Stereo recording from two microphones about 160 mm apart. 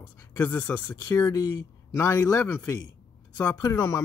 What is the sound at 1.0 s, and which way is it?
Speech, 20° left (ahead or behind).